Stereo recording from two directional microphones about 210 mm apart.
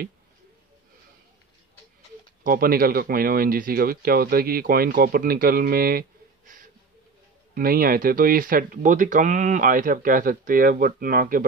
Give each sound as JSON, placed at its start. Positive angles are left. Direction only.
{"t": 2.4, "sound": "speech", "side_deg": -45}